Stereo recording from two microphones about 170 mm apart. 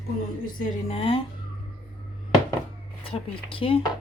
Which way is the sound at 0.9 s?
35° left (ahead or behind).